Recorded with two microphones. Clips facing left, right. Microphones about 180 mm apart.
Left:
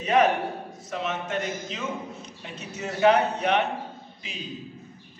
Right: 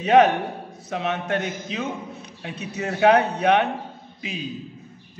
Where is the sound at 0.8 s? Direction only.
60° right (ahead or behind).